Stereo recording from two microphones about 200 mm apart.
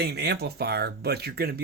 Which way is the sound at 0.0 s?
55° right (ahead or behind).